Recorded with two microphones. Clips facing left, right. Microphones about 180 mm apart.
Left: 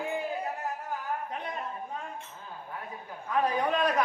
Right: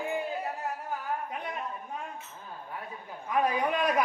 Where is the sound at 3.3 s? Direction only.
10° right (ahead or behind).